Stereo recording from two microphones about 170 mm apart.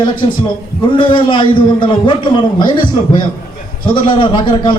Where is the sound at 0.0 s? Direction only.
30° left (ahead or behind).